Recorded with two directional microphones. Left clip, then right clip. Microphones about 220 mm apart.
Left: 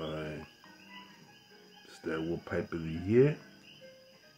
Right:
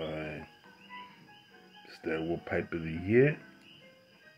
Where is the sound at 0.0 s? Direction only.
10° left (ahead or behind).